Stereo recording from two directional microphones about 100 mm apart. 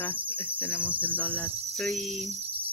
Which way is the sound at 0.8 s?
15° right (ahead or behind).